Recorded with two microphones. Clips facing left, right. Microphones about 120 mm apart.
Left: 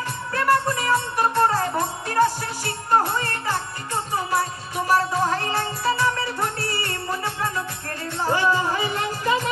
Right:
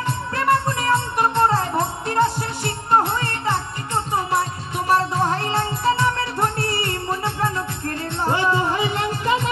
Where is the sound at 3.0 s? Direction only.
25° right (ahead or behind).